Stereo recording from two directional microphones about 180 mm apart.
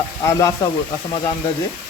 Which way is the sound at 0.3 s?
20° left (ahead or behind).